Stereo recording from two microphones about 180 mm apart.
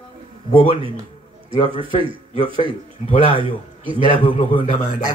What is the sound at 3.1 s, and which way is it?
Speech, 30° left (ahead or behind).